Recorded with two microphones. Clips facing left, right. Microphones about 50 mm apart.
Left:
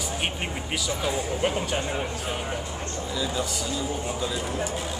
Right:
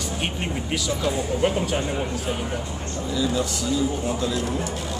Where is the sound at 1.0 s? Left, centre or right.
Centre.